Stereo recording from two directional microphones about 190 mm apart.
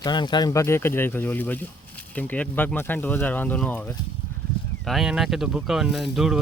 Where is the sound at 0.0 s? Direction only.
25° left (ahead or behind).